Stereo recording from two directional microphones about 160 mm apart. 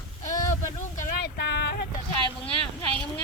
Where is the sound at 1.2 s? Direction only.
90° left.